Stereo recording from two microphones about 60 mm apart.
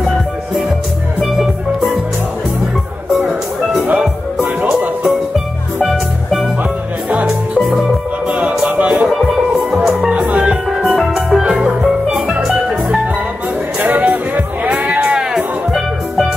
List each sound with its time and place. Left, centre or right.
3.8 s music: right
5.8 s music: centre
7.1 s music: right
7.5 s music: centre
8.3 s music: right
9.0 s music: centre
10.0 s music: centre
10.8 s music: centre
11.4 s music: centre
11.8 s music: centre
13.7 s music: right
15.1 s music: centre